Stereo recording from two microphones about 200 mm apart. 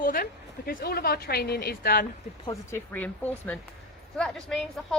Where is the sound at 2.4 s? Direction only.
10° left (ahead or behind).